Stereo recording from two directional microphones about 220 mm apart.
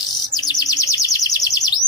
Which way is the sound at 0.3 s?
20° left (ahead or behind).